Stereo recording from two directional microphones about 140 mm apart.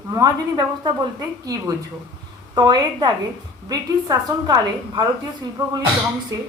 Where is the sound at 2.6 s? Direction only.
30° right (ahead or behind).